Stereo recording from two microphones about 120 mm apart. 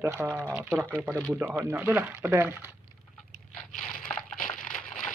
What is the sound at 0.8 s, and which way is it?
Speech, 15° right (ahead or behind).